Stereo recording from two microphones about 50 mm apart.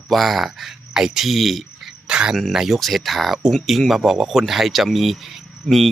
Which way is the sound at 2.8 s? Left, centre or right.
Centre.